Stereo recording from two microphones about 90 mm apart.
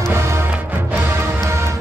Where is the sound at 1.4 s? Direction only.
35° right (ahead or behind).